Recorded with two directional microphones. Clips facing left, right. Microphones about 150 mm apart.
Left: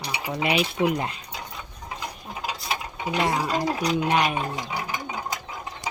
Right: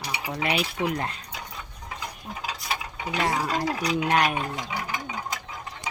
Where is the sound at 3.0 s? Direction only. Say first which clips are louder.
Left 3 dB; 20° left (ahead or behind).